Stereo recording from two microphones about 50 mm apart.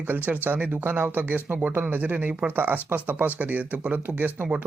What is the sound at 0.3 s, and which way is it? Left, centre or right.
Speech, right.